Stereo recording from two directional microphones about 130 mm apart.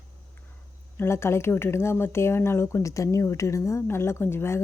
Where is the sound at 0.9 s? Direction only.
20° left (ahead or behind).